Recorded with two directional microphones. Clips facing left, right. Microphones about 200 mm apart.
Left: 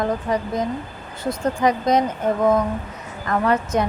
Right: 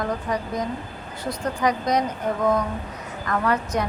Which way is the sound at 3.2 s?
25° left (ahead or behind).